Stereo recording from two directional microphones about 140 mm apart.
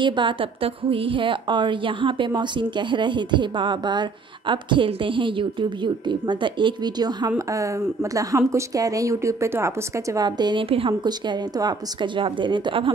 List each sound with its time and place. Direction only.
0.0 s a woman's voice: 35° right (ahead or behind)